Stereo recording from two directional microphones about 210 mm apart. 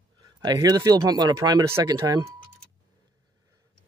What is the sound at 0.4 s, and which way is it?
Speech, 15° right (ahead or behind).